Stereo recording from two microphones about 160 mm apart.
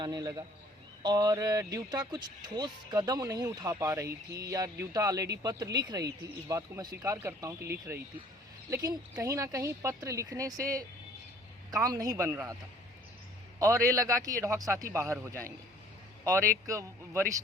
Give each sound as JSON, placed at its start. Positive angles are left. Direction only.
{"t": 0.0, "sound": "speech", "side_deg": -25}
{"t": 11.7, "sound": "speech", "side_deg": -20}
{"t": 13.6, "sound": "speech", "side_deg": -20}
{"t": 16.6, "sound": "speech", "side_deg": -20}